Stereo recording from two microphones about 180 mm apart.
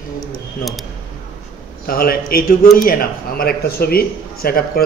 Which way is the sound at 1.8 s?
55° left (ahead or behind).